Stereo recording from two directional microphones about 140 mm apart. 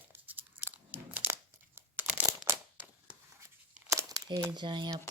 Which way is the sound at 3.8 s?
20° right (ahead or behind).